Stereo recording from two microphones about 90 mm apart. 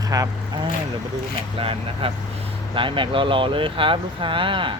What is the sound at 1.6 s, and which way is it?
Speech, 90° right.